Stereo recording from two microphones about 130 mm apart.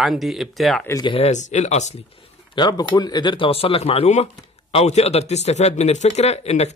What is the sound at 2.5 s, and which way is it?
Speech, 35° left (ahead or behind).